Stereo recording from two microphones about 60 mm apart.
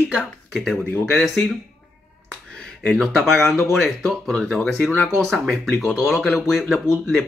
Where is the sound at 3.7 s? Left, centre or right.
Centre.